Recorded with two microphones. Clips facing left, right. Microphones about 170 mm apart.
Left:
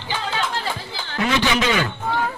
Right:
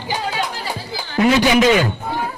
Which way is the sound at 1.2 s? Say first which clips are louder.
Right 7 dB; 40° right (ahead or behind).